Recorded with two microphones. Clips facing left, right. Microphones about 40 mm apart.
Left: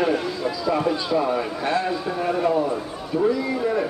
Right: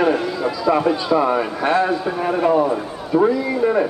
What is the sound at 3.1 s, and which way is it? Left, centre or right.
Speech, right.